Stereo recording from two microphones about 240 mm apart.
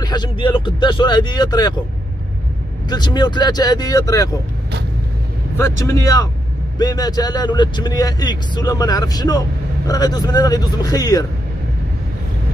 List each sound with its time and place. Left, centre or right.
0.0 s speech: centre
2.9 s speech: centre
5.6 s speech: centre